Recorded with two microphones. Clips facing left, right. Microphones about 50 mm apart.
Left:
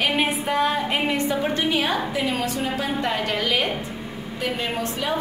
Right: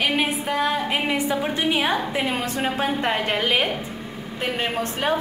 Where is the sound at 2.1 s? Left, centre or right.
Right.